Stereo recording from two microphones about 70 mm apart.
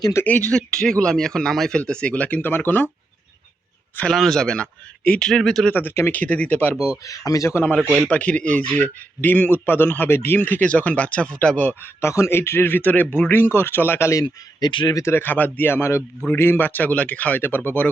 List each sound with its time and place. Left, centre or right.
0.2 s speech: left
0.5 s speech: centre
1.8 s a man's voice: centre
4.1 s speech: centre
5.7 s speech: left
6.1 s a man's voice: left
6.7 s speech: centre
7.0 s speech: left
8.1 s a man's voice: centre
11.9 s speech: left
14.6 s speech: left
15.0 s speech: left
16.3 s a man's voice: left